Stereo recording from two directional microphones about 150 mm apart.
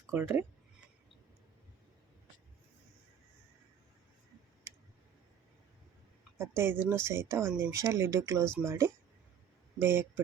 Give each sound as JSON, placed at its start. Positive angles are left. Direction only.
{"t": 0.1, "sound": "speech", "side_deg": -15}
{"t": 6.6, "sound": "speech", "side_deg": -15}